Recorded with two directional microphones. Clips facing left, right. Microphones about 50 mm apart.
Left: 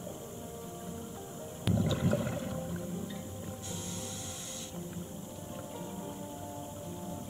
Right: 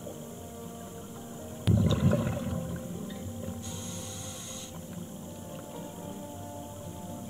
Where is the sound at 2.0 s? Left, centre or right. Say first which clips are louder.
Right 3 dB; right.